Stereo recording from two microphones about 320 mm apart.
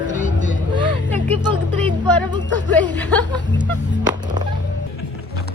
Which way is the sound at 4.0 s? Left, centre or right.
Centre.